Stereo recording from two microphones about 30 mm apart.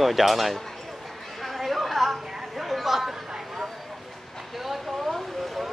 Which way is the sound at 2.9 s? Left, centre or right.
Centre.